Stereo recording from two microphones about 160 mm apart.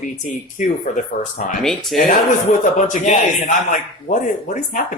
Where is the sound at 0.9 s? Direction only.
50° left (ahead or behind).